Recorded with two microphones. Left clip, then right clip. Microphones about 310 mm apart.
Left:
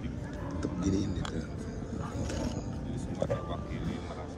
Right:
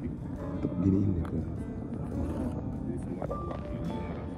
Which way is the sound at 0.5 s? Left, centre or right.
Centre.